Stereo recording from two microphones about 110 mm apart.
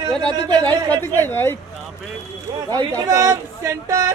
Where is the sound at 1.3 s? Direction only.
20° left (ahead or behind).